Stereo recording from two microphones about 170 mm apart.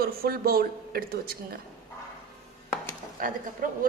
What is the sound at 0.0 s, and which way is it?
A woman's voice, 60° right (ahead or behind).